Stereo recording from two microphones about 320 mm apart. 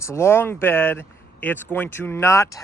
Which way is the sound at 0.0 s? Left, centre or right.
Centre.